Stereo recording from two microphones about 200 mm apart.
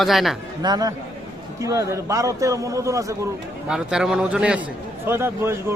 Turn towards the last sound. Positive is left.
turn(degrees=-10)  # may be behind; listen again after turning